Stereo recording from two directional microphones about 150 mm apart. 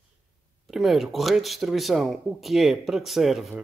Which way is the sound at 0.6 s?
Centre (ahead or behind).